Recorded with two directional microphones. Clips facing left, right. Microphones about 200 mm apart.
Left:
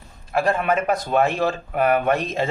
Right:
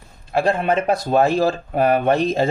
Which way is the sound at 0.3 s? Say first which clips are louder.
Right 2 dB; 30° right (ahead or behind).